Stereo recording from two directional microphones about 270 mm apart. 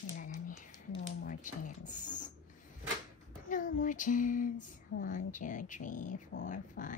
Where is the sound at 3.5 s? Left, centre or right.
Left.